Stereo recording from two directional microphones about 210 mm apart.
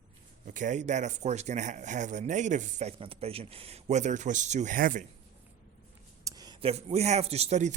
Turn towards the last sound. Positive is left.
turn(degrees=-30)  # may be behind; listen again after turning